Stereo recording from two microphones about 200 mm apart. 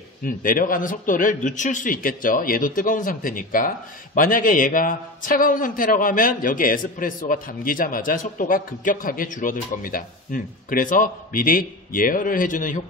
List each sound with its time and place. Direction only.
0.2 s a man's voice: 45° left (ahead or behind)